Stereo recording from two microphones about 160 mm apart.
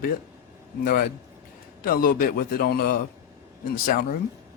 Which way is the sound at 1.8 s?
65° left (ahead or behind).